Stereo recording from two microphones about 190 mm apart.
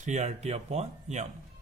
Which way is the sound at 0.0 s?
35° right (ahead or behind).